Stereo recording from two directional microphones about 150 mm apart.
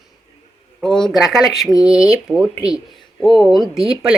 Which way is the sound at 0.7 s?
Centre (ahead or behind).